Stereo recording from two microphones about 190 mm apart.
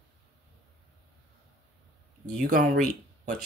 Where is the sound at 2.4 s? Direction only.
50° right (ahead or behind).